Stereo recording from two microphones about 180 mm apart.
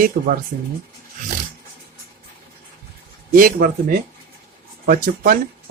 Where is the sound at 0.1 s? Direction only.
55° right (ahead or behind).